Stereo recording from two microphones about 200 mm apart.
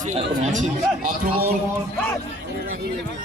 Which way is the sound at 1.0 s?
50° right (ahead or behind).